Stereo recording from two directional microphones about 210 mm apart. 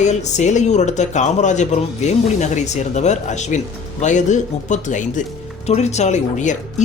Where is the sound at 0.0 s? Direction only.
35° left (ahead or behind).